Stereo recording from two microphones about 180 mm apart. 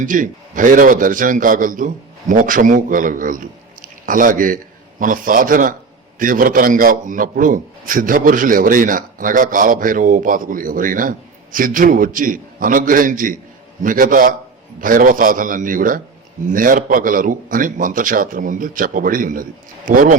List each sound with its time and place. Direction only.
0.0 s a man's voice: 45° right (ahead or behind)